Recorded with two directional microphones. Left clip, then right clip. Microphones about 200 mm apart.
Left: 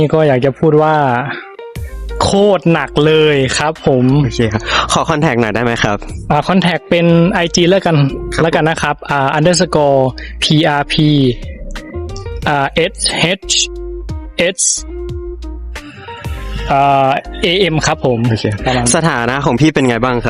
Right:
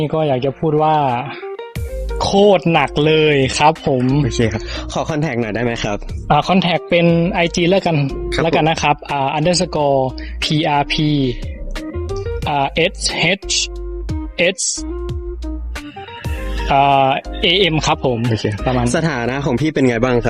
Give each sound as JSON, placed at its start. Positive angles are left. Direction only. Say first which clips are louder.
{"t": 0.0, "sound": "speech", "louder": "left 6 dB", "side_deg": 55}
{"t": 4.3, "sound": "speech", "louder": "left 2 dB", "side_deg": 10}
{"t": 4.6, "sound": "speech", "louder": "left 10 dB", "side_deg": 50}
{"t": 8.0, "sound": "speech", "louder": "left 4 dB", "side_deg": 0}
{"t": 8.4, "sound": "speech", "louder": "left 1 dB", "side_deg": 45}
{"t": 16.6, "sound": "speech", "louder": "left 2 dB", "side_deg": 25}
{"t": 18.4, "sound": "speech", "louder": "left 3 dB", "side_deg": 25}
{"t": 18.9, "sound": "speech", "louder": "left 5 dB", "side_deg": 55}
{"t": 20.0, "sound": "speech", "louder": "left 1 dB", "side_deg": 25}